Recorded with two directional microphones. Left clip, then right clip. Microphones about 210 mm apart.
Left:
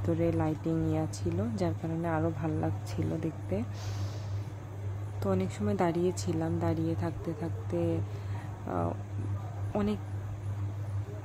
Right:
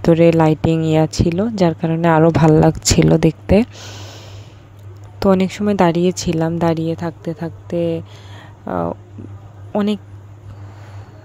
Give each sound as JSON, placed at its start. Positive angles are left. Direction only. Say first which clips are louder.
{"t": 0.0, "sound": "speech", "louder": "right 19 dB", "side_deg": -45}
{"t": 3.7, "sound": "a sound", "louder": "right 10 dB", "side_deg": -30}
{"t": 5.2, "sound": "speech", "louder": "right 17 dB", "side_deg": -45}